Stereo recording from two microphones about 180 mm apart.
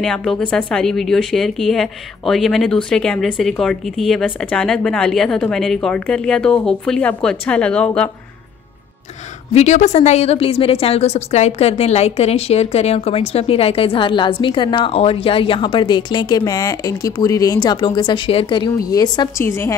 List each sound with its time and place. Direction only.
0.0 s a woman's voice: 5° left (ahead or behind)
9.5 s a woman's voice: 40° left (ahead or behind); by 19.7 s 15° left (ahead or behind)